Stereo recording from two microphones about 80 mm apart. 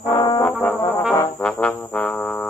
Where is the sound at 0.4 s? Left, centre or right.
Left.